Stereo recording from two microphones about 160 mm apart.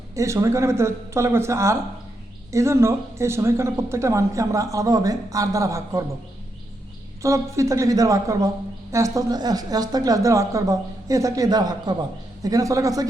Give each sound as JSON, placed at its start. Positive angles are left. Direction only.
{"t": 0.1, "sound": "a woman's voice", "side_deg": -20}
{"t": 7.2, "sound": "a woman's voice", "side_deg": -20}